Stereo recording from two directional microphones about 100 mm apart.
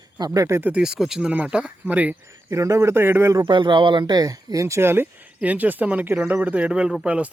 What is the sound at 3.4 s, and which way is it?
A man's voice, 50° right (ahead or behind).